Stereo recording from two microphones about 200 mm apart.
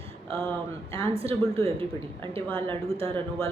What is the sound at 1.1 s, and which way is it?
A woman's voice, 30° right (ahead or behind).